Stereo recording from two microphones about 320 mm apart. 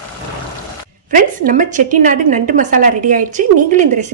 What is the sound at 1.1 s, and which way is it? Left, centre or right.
A woman's voice, right.